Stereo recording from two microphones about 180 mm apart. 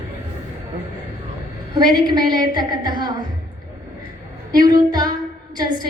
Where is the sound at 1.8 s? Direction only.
25° right (ahead or behind).